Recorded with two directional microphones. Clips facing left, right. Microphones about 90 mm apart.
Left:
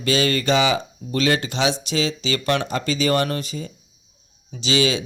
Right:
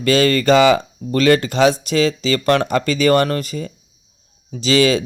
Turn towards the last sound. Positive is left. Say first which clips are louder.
# right 6 dB
turn(degrees=-45)  # may be behind; listen again after turning